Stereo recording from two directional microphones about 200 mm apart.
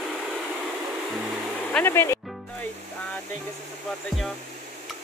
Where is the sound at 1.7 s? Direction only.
10° left (ahead or behind).